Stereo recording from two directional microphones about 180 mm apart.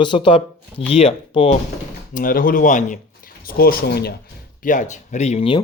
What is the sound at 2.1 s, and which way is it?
Speech, 50° left (ahead or behind).